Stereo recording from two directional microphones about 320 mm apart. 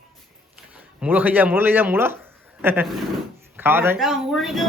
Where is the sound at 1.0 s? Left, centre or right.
Centre.